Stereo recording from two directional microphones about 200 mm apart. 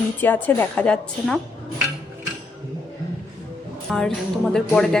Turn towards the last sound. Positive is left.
turn(degrees=5)  # may be behind; listen again after turning